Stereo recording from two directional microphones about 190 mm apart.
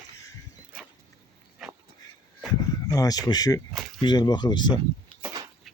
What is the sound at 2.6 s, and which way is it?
Speech, 20° left (ahead or behind).